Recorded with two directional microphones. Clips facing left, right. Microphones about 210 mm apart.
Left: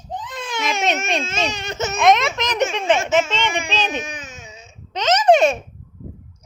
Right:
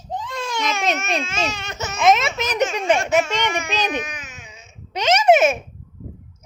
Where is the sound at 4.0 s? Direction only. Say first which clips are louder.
Even; 25° left (ahead or behind).